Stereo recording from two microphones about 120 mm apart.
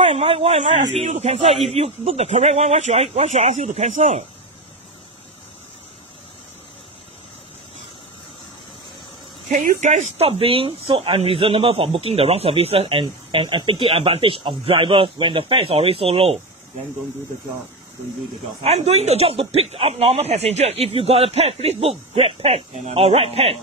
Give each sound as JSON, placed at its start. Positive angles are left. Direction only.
{"t": 0.1, "sound": "speech", "side_deg": -55}
{"t": 9.5, "sound": "speech", "side_deg": -90}
{"t": 10.1, "sound": "speech", "side_deg": -55}
{"t": 18.6, "sound": "speech", "side_deg": -60}